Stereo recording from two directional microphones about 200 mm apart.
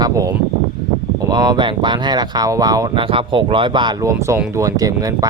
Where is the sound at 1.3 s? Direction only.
20° right (ahead or behind).